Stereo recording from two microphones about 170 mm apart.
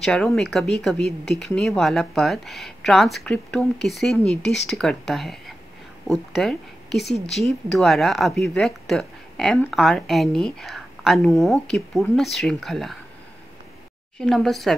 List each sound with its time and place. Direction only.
0.0 s speech: 5° left (ahead or behind)
14.2 s speech: 5° left (ahead or behind)